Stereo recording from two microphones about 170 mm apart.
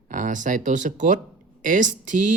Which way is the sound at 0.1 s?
50° right (ahead or behind).